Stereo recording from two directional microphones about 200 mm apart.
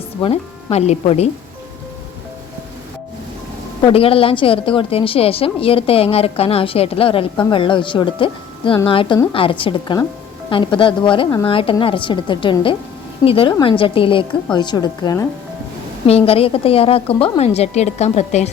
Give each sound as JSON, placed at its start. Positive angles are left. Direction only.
{"t": 0.2, "sound": "speech", "side_deg": 30}
{"t": 3.8, "sound": "a woman's voice", "side_deg": 30}
{"t": 16.0, "sound": "a woman's voice", "side_deg": 30}